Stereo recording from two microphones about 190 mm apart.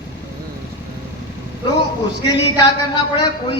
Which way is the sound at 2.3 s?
20° left (ahead or behind).